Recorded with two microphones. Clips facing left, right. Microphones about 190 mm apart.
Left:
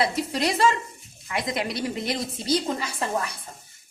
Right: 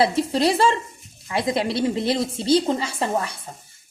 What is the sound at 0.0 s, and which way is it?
A woman's voice, 30° right (ahead or behind).